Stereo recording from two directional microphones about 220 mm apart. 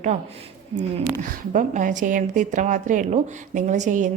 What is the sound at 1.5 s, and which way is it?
A woman's voice, 35° right (ahead or behind).